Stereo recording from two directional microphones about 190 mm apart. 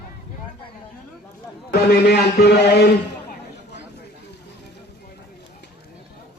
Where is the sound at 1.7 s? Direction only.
55° left (ahead or behind).